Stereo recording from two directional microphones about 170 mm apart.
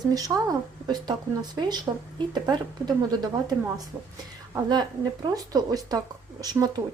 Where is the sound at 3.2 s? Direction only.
25° right (ahead or behind).